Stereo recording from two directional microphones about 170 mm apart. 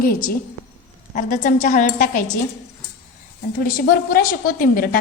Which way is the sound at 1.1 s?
50° left (ahead or behind).